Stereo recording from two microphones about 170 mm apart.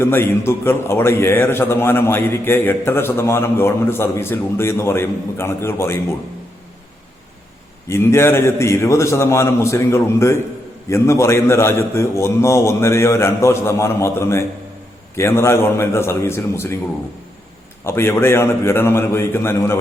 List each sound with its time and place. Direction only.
0.0 s a man's voice: 15° left (ahead or behind)
7.9 s a man's voice: 15° left (ahead or behind)
17.8 s a man's voice: 15° left (ahead or behind)